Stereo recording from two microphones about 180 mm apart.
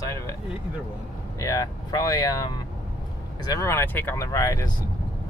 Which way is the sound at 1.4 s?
20° left (ahead or behind).